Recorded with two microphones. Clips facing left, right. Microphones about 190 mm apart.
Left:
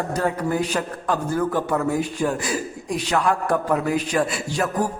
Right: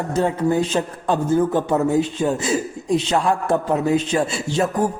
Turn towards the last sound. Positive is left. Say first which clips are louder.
# right 3 dB
turn(degrees=-25)  # may be behind; listen again after turning